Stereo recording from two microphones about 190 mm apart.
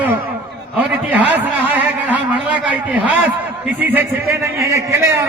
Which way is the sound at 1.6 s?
10° right (ahead or behind).